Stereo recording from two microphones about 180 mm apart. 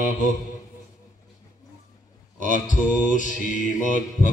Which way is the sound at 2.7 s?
45° left (ahead or behind).